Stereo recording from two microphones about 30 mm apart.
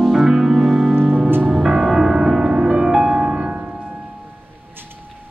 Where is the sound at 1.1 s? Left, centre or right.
Right.